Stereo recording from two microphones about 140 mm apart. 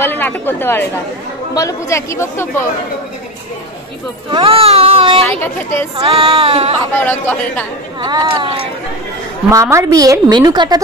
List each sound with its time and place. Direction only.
0.0 s a woman's voice: 15° left (ahead or behind)
4.3 s speech: 40° right (ahead or behind)
5.4 s a woman's voice: 15° left (ahead or behind)
5.9 s child singing: 40° right (ahead or behind)
6.9 s a woman's voice: 15° left (ahead or behind)
8.0 s speech: 30° right (ahead or behind)
9.5 s a woman's voice: 20° right (ahead or behind)